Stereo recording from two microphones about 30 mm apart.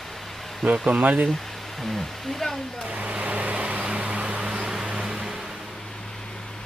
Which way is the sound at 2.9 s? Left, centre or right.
Right.